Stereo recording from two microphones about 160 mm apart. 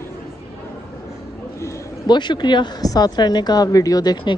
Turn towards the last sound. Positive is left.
turn(degrees=25)  # may be behind; listen again after turning